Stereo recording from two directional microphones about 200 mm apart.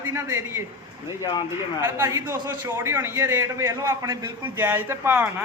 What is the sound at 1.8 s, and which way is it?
A man's voice, 10° right (ahead or behind).